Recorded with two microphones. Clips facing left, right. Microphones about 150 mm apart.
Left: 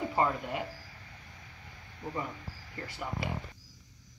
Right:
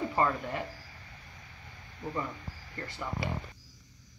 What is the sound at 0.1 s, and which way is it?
Speech, 20° left (ahead or behind).